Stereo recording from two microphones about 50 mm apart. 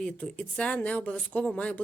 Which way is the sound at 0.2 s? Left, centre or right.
Left.